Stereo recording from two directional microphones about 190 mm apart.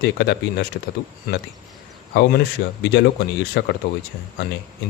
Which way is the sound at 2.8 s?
65° left (ahead or behind).